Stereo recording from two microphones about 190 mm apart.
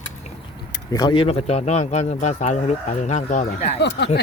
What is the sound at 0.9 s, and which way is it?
A man's voice, 25° left (ahead or behind).